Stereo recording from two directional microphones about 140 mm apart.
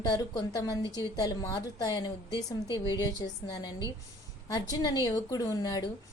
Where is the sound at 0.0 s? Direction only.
25° left (ahead or behind).